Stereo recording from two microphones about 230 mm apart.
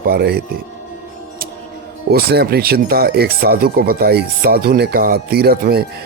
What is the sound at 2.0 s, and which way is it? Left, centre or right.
Speech, right.